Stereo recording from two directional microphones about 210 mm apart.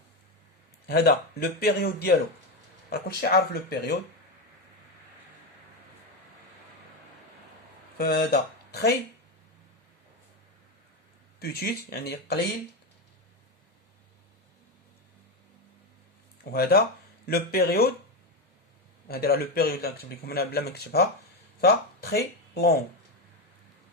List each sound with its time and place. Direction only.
0.9 s speech: 50° left (ahead or behind)
7.9 s speech: 50° left (ahead or behind)
11.3 s speech: 45° left (ahead or behind)
16.4 s speech: 45° left (ahead or behind)
19.0 s speech: 45° left (ahead or behind)